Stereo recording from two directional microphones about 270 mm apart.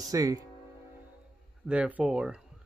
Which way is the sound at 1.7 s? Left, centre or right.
Centre.